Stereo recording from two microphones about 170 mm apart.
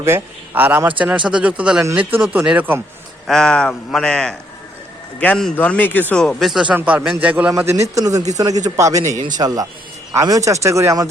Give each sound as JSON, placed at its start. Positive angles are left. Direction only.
{"t": 0.0, "sound": "speech", "side_deg": -15}
{"t": 3.2, "sound": "a man's voice", "side_deg": 5}